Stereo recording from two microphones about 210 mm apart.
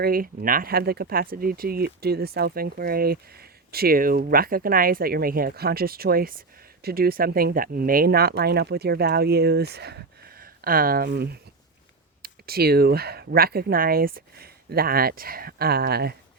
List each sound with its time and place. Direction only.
0.0 s speech: 45° right (ahead or behind)